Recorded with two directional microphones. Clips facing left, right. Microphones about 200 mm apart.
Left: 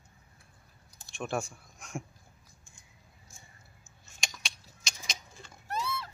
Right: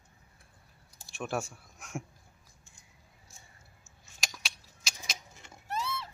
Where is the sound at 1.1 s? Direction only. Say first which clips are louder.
Left 1 dB; 5° right (ahead or behind).